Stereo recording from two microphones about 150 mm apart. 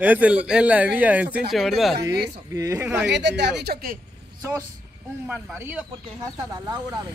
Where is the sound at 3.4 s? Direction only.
90° right.